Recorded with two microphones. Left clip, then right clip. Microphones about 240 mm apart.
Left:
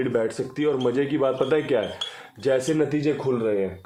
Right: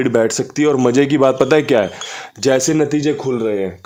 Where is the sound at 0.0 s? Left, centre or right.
Right.